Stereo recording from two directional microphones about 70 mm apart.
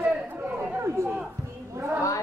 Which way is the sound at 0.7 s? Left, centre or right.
Right.